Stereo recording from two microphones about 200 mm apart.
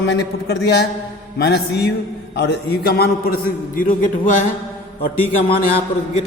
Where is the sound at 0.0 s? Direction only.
55° left (ahead or behind); by 4.1 s 40° left (ahead or behind).